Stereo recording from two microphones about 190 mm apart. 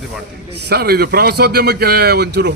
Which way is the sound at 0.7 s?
55° right (ahead or behind).